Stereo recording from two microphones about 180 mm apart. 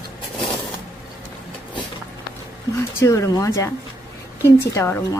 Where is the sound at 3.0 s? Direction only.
15° left (ahead or behind).